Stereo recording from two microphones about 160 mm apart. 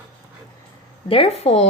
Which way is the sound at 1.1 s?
35° left (ahead or behind).